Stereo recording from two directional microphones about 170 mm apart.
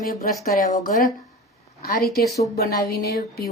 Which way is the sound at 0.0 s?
55° left (ahead or behind).